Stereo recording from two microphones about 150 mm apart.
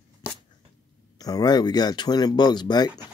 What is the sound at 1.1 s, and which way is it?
Speech, 25° left (ahead or behind).